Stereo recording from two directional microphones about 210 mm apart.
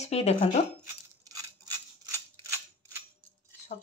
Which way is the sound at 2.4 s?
10° right (ahead or behind).